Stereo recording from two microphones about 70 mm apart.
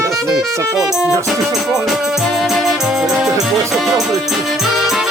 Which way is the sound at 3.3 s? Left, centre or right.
Right.